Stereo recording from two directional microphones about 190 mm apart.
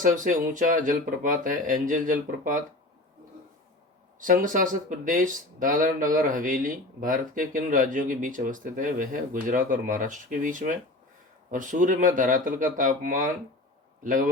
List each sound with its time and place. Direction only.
0.0 s speech: 45° right (ahead or behind)
4.2 s speech: 45° right (ahead or behind)